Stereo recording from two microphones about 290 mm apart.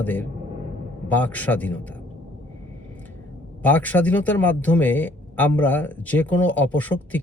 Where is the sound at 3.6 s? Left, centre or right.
Centre.